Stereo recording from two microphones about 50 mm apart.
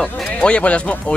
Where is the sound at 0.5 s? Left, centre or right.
Left.